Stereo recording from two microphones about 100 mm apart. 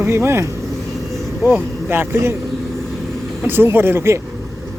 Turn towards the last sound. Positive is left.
turn(degrees=-25)  # may be behind; listen again after turning